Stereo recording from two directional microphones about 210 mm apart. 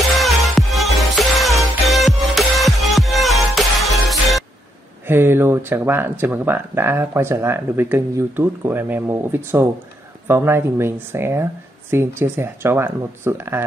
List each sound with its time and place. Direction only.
0.2 s music: centre (ahead or behind)
5.0 s speech: 10° right (ahead or behind)